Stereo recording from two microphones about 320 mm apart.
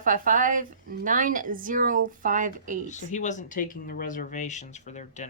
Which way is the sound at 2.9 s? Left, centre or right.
Left.